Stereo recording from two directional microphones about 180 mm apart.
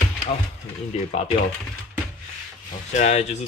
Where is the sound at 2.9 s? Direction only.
40° left (ahead or behind).